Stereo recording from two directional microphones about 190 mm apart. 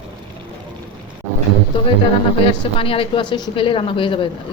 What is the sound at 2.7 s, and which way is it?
A woman's voice, 30° left (ahead or behind).